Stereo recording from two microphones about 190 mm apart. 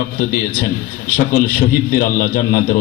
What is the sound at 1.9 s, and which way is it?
Speech, 50° left (ahead or behind).